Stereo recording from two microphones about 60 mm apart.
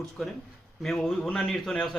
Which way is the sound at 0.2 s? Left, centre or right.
Centre.